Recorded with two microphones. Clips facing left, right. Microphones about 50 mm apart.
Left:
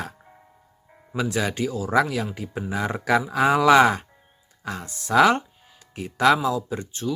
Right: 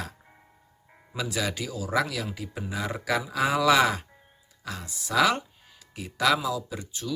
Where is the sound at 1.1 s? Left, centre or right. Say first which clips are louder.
Left 5 dB; left.